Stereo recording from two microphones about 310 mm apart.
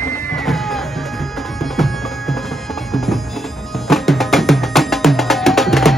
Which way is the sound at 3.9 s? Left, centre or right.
Centre.